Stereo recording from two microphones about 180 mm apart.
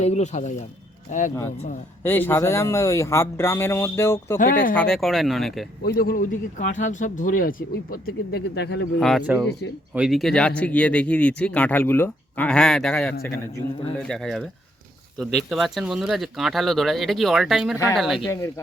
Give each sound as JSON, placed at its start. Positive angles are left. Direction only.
{"t": 0.0, "sound": "speech", "side_deg": 40}
{"t": 2.0, "sound": "speech", "side_deg": 10}
{"t": 4.4, "sound": "speech", "side_deg": 50}
{"t": 4.7, "sound": "speech", "side_deg": 5}
{"t": 5.8, "sound": "speech", "side_deg": 55}
{"t": 9.0, "sound": "speech", "side_deg": 0}
{"t": 18.3, "sound": "speech", "side_deg": 15}